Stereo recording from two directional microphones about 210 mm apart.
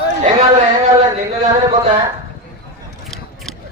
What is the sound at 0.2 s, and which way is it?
Speech, 35° right (ahead or behind).